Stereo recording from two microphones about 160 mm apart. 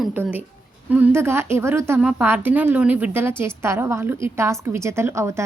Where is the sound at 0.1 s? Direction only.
10° right (ahead or behind).